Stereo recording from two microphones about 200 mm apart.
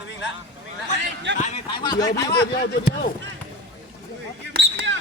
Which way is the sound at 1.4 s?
30° left (ahead or behind).